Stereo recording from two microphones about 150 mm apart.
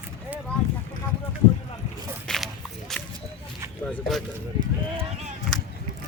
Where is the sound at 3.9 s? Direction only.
Centre (ahead or behind).